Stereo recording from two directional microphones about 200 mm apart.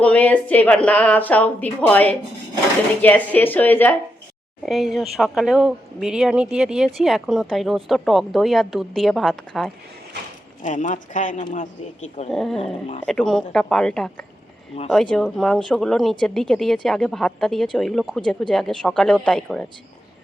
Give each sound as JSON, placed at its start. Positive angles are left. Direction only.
{"t": 0.0, "sound": "speech", "side_deg": 5}
{"t": 10.6, "sound": "speech", "side_deg": 40}
{"t": 12.3, "sound": "speech", "side_deg": 0}